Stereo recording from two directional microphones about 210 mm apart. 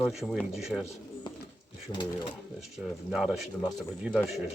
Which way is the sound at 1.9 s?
20° left (ahead or behind).